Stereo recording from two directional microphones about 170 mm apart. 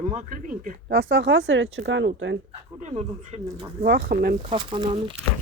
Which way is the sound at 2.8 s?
45° right (ahead or behind).